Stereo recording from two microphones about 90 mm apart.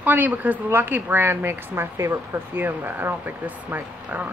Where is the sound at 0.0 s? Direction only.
20° right (ahead or behind).